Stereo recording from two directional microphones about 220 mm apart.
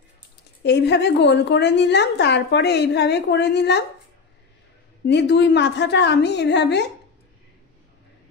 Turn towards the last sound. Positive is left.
turn(degrees=50)  # may be behind; listen again after turning